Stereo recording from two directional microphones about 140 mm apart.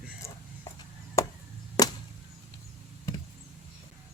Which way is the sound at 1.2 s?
25° left (ahead or behind).